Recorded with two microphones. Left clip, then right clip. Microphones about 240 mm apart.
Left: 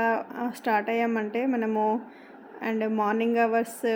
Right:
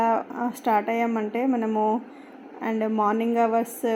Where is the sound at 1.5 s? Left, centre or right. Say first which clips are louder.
Right 2 dB; centre.